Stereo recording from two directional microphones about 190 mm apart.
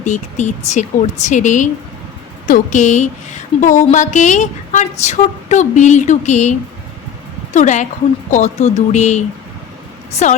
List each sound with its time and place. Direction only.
0.0 s a woman's voice: 40° left (ahead or behind)